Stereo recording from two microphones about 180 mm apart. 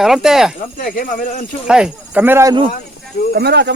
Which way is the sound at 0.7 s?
50° left (ahead or behind).